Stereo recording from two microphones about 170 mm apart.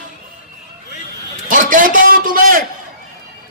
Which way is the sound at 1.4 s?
50° right (ahead or behind).